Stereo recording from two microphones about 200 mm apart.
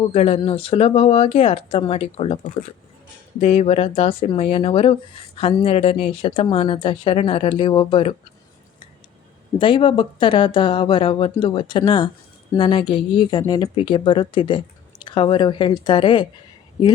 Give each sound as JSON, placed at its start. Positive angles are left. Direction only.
{"t": 0.1, "sound": "a woman's voice", "side_deg": 30}
{"t": 3.4, "sound": "a woman's voice", "side_deg": 30}
{"t": 9.6, "sound": "a woman's voice", "side_deg": 25}